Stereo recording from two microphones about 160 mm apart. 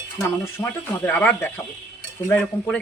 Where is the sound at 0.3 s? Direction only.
15° left (ahead or behind).